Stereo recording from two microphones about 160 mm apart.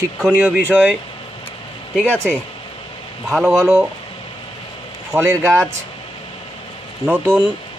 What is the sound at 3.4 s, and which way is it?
Speech, 20° right (ahead or behind).